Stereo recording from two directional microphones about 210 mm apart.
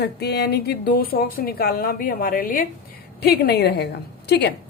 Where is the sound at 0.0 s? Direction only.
50° left (ahead or behind).